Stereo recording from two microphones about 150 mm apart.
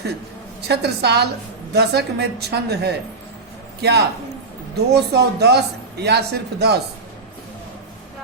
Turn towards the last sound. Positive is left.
turn(degrees=-90)